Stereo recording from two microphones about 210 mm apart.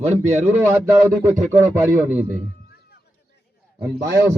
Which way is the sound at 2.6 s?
50° left (ahead or behind).